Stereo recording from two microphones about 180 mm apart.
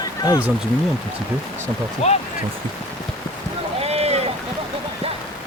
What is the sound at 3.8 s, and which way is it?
Boat, 35° right (ahead or behind).